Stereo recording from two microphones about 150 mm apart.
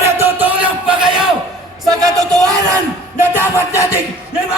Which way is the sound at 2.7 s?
20° right (ahead or behind).